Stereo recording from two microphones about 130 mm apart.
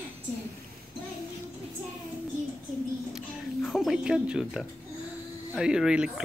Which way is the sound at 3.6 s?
Centre (ahead or behind).